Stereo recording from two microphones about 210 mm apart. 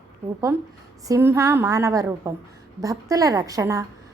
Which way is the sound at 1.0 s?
15° right (ahead or behind).